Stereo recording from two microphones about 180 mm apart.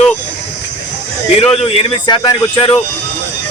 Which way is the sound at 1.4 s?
35° left (ahead or behind).